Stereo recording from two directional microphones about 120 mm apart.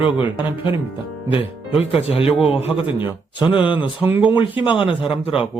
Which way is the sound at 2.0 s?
55° left (ahead or behind).